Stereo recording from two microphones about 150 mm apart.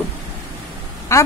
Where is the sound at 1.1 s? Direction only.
20° left (ahead or behind).